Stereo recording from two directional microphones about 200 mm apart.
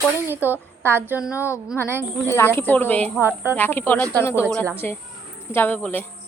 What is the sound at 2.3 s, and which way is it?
Speech, 10° left (ahead or behind).